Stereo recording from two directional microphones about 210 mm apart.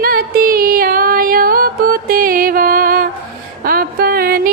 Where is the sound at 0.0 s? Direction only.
45° right (ahead or behind).